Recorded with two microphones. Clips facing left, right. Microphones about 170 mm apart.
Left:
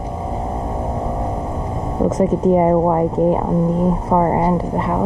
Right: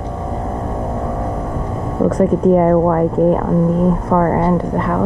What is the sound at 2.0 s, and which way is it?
Speech, 15° left (ahead or behind).